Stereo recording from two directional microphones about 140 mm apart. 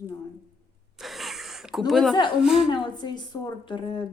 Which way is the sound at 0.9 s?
Centre (ahead or behind).